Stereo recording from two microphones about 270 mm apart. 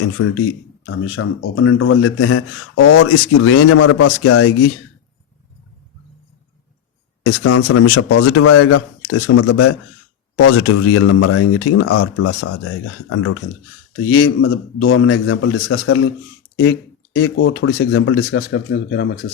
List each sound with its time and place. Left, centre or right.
0.2 s speech: left
7.3 s speech: left
17.2 s speech: left